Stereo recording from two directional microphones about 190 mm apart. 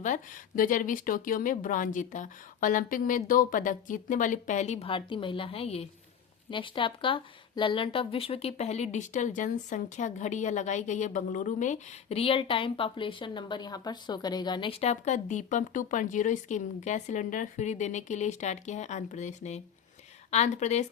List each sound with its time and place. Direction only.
0.0 s speech: 45° left (ahead or behind)